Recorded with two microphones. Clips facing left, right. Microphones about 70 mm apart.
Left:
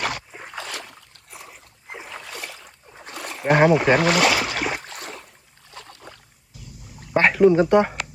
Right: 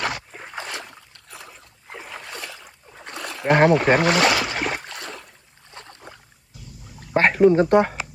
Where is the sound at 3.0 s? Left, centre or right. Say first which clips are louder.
Right 1 dB; right.